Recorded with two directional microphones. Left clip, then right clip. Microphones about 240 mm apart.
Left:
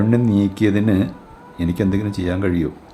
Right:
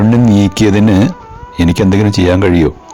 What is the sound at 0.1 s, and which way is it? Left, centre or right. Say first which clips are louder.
Speech: right 7 dB; right.